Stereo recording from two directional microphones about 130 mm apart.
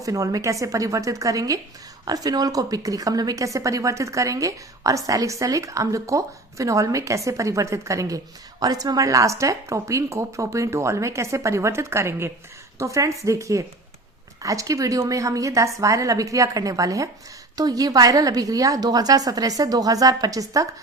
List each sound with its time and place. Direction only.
0.0 s a woman's voice: 25° right (ahead or behind)